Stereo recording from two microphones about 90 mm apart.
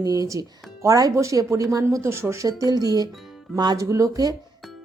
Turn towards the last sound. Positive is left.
turn(degrees=-45)  # may be behind; listen again after turning